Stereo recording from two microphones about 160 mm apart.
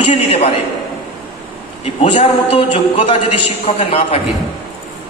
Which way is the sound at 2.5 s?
35° left (ahead or behind).